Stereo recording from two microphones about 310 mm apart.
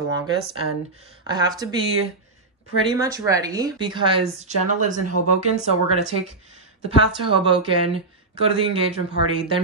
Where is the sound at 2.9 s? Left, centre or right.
Centre.